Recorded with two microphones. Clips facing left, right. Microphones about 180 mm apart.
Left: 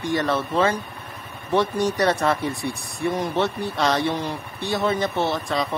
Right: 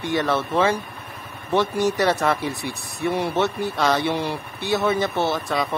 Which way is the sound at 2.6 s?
5° right (ahead or behind).